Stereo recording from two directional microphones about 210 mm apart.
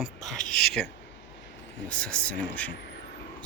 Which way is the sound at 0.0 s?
Centre (ahead or behind).